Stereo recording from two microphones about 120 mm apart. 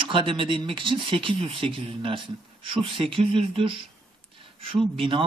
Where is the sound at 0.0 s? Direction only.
45° right (ahead or behind).